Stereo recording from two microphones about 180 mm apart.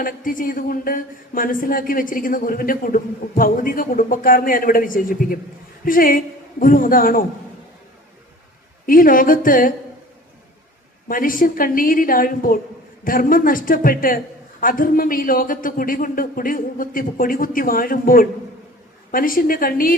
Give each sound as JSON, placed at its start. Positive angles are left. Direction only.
{"t": 0.0, "sound": "speech", "side_deg": 50}
{"t": 8.9, "sound": "speech", "side_deg": 50}
{"t": 11.1, "sound": "speech", "side_deg": 50}